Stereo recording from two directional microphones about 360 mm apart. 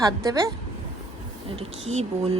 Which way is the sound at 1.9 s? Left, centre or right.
Centre.